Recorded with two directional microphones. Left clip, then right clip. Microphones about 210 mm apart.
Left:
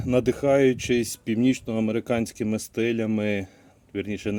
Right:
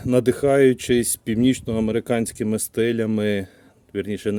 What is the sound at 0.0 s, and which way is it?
Speech, 45° right (ahead or behind).